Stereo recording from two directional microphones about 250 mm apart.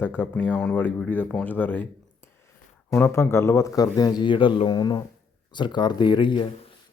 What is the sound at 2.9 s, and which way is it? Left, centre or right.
Speech, centre.